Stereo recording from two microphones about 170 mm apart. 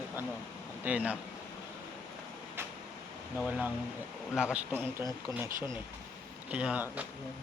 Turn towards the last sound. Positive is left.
turn(degrees=-10)  # may be behind; listen again after turning